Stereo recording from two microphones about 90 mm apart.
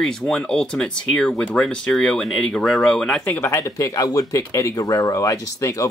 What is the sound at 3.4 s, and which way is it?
Speech, 30° left (ahead or behind).